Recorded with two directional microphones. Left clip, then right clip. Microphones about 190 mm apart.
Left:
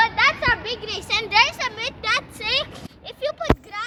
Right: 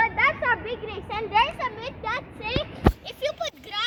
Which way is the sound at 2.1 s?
5° right (ahead or behind).